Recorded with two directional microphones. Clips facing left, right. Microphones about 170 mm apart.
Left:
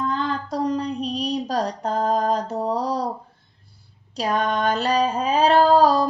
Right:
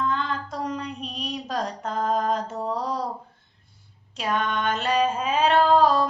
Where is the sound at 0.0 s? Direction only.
35° left (ahead or behind).